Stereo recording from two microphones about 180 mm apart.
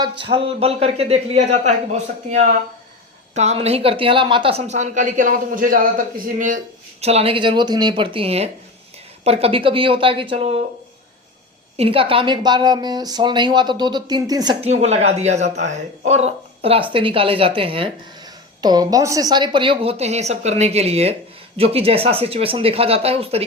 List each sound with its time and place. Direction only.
0.0 s a woman's voice: 30° right (ahead or behind); by 5.9 s 50° right (ahead or behind)
7.0 s speech: 35° right (ahead or behind)
11.8 s speech: 30° right (ahead or behind)
14.6 s a woman's voice: 35° right (ahead or behind)